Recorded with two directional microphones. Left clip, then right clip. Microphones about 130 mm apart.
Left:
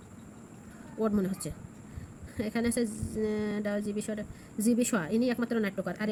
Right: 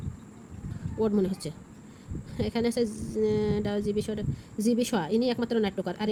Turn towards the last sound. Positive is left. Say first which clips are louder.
# right 3 dB
turn(degrees=-50)  # may be behind; listen again after turning